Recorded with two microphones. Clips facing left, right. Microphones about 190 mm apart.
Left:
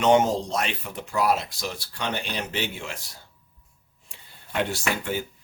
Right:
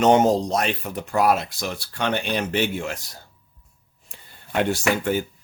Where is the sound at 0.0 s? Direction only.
40° right (ahead or behind).